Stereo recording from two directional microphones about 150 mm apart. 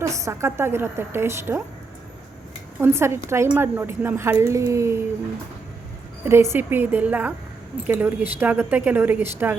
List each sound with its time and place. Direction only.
0.0 s speech: 20° right (ahead or behind)
2.8 s speech: 15° right (ahead or behind)
6.2 s speech: 15° right (ahead or behind)